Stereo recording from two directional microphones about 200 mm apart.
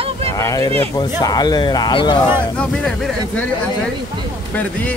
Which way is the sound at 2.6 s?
Centre (ahead or behind).